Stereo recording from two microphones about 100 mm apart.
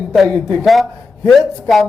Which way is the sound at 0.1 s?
Centre (ahead or behind).